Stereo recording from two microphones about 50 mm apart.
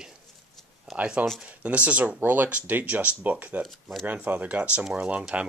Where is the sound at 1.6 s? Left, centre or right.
Right.